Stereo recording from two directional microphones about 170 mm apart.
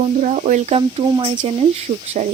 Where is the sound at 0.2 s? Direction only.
45° right (ahead or behind).